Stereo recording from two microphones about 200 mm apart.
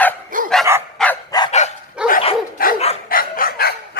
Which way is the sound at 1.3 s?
20° left (ahead or behind).